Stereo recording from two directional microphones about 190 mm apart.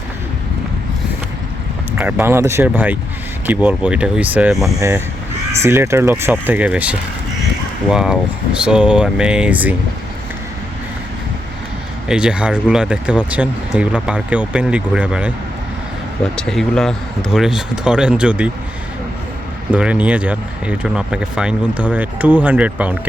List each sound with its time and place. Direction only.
2.0 s speech: 10° right (ahead or behind)
12.0 s speech: 5° right (ahead or behind)
19.7 s speech: 5° right (ahead or behind)